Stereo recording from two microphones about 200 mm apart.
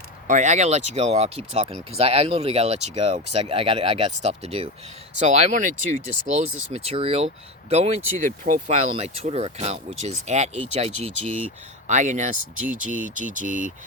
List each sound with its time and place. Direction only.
0.3 s speech: 35° right (ahead or behind)